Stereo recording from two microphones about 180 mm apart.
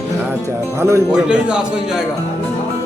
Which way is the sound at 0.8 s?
10° right (ahead or behind).